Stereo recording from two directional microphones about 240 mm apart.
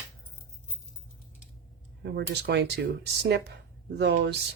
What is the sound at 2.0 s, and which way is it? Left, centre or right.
Speech, right.